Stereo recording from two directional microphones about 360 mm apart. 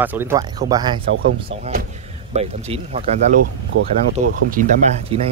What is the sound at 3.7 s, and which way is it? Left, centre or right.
Speech, right.